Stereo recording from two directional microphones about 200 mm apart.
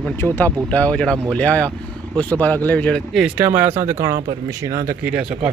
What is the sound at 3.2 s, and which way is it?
A man's voice, 10° right (ahead or behind).